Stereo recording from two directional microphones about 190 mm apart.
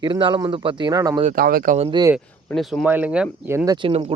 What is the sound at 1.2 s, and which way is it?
Speech, 45° right (ahead or behind).